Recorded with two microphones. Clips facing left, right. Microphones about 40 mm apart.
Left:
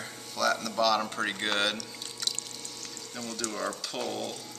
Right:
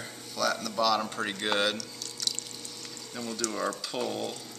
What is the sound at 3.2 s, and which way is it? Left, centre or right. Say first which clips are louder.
Speech: right 2 dB; centre.